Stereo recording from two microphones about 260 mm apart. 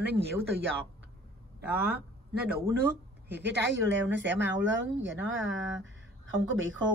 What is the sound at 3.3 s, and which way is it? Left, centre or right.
Speech, right.